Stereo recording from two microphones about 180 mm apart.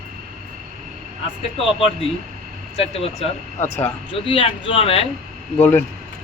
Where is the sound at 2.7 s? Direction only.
35° left (ahead or behind).